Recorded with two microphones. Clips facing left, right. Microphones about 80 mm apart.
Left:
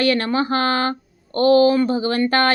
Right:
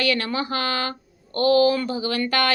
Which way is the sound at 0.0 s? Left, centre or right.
Left.